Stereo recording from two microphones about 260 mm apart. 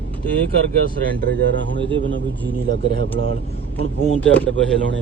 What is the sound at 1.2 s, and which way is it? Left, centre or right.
Speech, right.